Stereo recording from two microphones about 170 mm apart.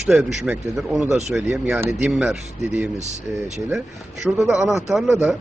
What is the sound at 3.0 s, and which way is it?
Speech, 40° right (ahead or behind).